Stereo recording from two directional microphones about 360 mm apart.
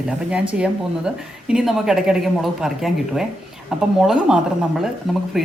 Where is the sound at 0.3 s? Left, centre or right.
Centre.